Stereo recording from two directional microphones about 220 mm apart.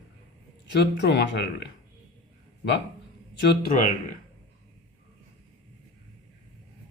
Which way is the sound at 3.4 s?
45° left (ahead or behind).